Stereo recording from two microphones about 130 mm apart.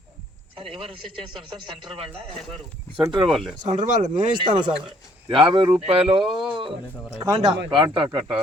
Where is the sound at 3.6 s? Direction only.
75° right (ahead or behind).